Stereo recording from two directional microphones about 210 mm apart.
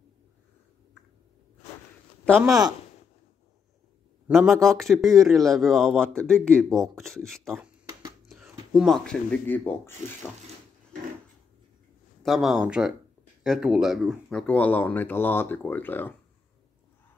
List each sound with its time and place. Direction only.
2.4 s speech: 15° right (ahead or behind)
4.3 s speech: centre (ahead or behind)
7.5 s a sound: 10° right (ahead or behind)
8.3 s speech: 5° right (ahead or behind)
12.2 s speech: centre (ahead or behind)